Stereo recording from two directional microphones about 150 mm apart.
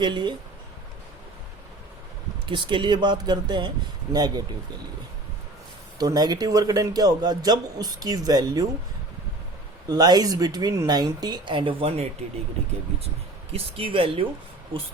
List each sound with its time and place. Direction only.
0.0 s speech: 30° right (ahead or behind)
2.5 s a man's voice: 30° right (ahead or behind)
6.0 s a man's voice: 25° right (ahead or behind)
9.9 s a man's voice: 25° right (ahead or behind)
13.5 s speech: 40° right (ahead or behind)